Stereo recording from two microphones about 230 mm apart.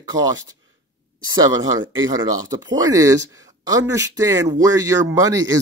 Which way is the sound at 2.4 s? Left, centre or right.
Centre.